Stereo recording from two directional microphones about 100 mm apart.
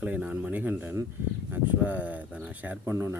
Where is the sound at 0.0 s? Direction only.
15° right (ahead or behind).